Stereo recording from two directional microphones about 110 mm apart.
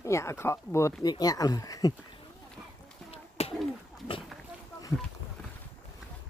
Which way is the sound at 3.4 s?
70° left (ahead or behind).